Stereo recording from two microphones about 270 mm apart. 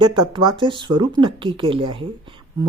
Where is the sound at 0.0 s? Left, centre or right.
Centre.